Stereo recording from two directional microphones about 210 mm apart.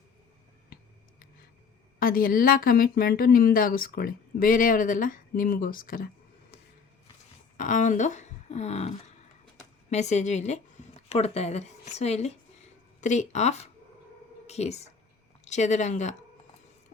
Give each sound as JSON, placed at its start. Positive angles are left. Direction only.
{"t": 2.0, "sound": "speech", "side_deg": 40}
{"t": 7.5, "sound": "a woman's voice", "side_deg": 35}